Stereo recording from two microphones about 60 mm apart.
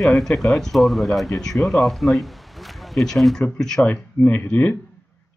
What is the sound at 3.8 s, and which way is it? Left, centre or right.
Speech, left.